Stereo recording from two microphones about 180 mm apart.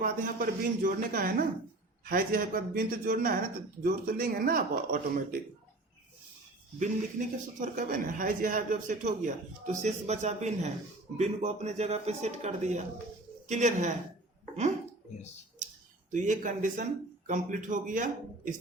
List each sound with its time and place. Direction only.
0.0 s speech: 50° right (ahead or behind)
6.7 s speech: 45° right (ahead or behind)
16.1 s speech: 45° right (ahead or behind)